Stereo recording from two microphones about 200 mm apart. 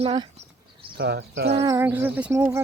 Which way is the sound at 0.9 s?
55° right (ahead or behind).